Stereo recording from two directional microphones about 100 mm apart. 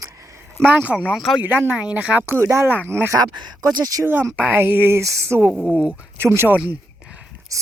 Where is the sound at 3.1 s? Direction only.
40° right (ahead or behind).